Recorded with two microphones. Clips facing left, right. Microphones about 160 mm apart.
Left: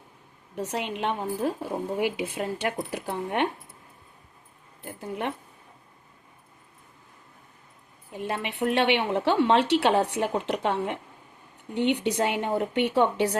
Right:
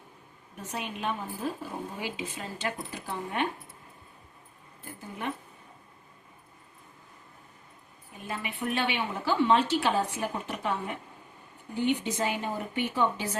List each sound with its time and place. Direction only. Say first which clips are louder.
0.5 s a woman's voice: left 7 dB; 75° left (ahead or behind)
4.8 s a woman's voice: left 6 dB; 70° left (ahead or behind)
8.1 s a woman's voice: left 6 dB; 70° left (ahead or behind)